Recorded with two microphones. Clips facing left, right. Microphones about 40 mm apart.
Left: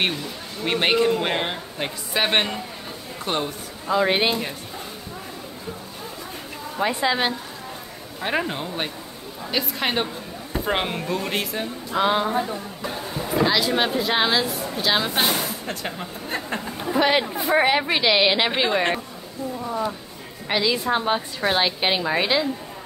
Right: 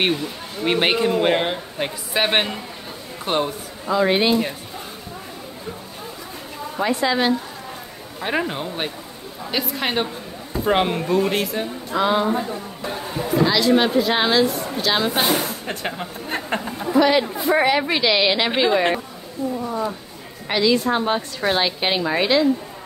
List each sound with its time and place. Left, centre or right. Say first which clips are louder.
0.0 s speech: right 3 dB; centre
3.9 s speech: right 2 dB; centre
6.8 s speech: right 2 dB; centre
8.2 s speech: right 1 dB; centre
13.5 s speech: right 4 dB; centre
15.6 s speech: right 3 dB; right
17.0 s speech: right 2 dB; centre
17.4 s speech: right 1 dB; centre
19.6 s a sound: left 2 dB; centre
20.4 s speech: right 3 dB; centre